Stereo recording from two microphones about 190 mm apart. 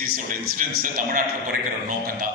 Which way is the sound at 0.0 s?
50° right (ahead or behind).